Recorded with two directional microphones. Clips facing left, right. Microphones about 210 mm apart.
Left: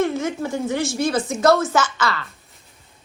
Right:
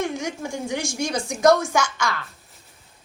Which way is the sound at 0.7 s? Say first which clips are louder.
Left 4 dB; 15° right (ahead or behind).